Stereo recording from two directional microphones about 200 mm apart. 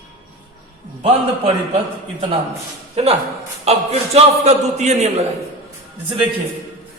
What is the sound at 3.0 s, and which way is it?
A man's voice, 30° right (ahead or behind).